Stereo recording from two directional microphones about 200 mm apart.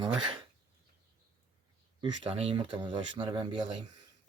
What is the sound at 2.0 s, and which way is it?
Speech, 25° right (ahead or behind).